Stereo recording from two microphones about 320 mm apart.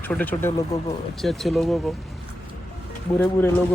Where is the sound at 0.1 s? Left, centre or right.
Centre.